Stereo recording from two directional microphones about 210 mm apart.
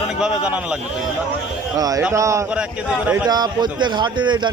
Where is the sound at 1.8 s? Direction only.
15° right (ahead or behind).